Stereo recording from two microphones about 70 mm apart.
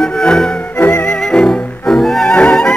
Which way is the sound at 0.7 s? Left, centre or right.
Left.